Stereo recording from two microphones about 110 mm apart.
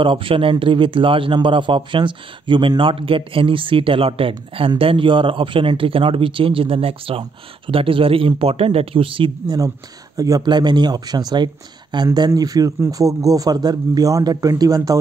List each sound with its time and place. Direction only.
0.0 s speech: 50° right (ahead or behind)
10.1 s speech: 35° right (ahead or behind)